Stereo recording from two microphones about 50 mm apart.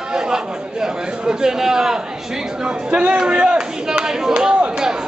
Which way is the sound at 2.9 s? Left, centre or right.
Right.